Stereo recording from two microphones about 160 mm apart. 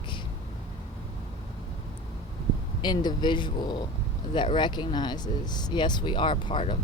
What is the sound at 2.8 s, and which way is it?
Speech, 25° left (ahead or behind).